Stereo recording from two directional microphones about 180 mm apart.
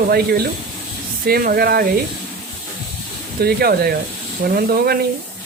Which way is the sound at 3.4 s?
60° right (ahead or behind).